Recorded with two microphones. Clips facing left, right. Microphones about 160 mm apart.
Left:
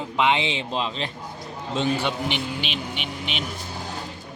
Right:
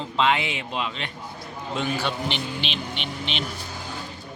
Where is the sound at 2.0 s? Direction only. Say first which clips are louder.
Left 2 dB; 10° left (ahead or behind).